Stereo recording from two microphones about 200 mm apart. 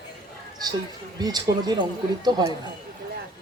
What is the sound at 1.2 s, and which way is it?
A man's voice, 20° right (ahead or behind).